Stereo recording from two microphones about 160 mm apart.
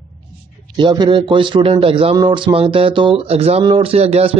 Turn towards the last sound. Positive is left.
turn(degrees=-40)  # may be behind; listen again after turning